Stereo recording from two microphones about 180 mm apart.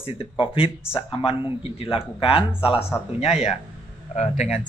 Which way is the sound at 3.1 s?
35° left (ahead or behind).